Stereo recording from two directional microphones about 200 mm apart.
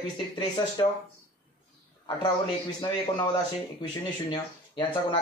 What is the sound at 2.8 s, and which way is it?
Speech, 20° left (ahead or behind).